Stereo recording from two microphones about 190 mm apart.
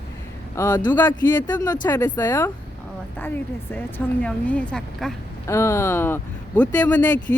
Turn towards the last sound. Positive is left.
turn(degrees=15)  # may be behind; listen again after turning